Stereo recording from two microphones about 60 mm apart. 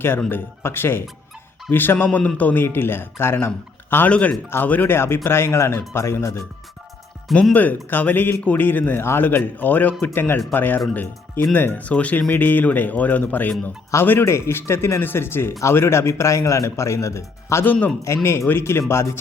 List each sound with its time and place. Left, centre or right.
0.3 s speech: left
2.0 s speech: left
4.1 s speech: left
7.5 s speech: left
11.9 s a man's voice: left
17.6 s speech: left
18.2 s speech: left